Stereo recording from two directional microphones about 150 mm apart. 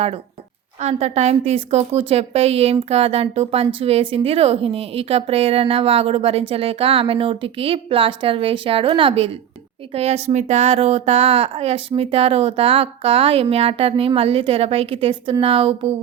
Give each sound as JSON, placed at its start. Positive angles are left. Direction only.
{"t": 0.8, "sound": "a woman's voice", "side_deg": -45}